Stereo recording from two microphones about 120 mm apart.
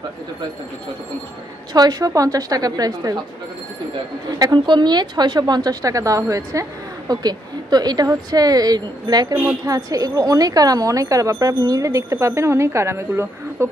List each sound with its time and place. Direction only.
1.7 s a woman's voice: 35° right (ahead or behind)
4.4 s a woman's voice: 40° right (ahead or behind); by 13.7 s 20° right (ahead or behind)